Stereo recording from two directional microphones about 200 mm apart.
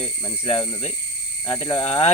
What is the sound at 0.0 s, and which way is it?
Speech, 25° left (ahead or behind).